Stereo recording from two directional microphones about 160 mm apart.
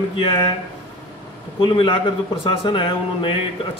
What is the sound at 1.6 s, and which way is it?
A man's voice, 35° left (ahead or behind).